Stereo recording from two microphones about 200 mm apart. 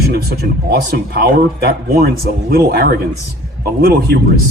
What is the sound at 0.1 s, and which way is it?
A man's voice, 50° right (ahead or behind).